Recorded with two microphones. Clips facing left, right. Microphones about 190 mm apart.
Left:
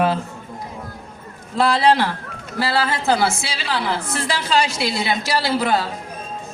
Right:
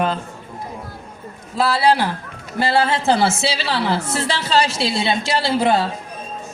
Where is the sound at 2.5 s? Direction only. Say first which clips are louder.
Right 3 dB; 25° right (ahead or behind).